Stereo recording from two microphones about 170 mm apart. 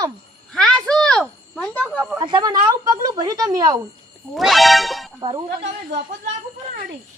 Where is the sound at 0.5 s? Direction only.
5° left (ahead or behind).